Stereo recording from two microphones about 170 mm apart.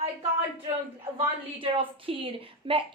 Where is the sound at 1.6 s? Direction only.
30° right (ahead or behind).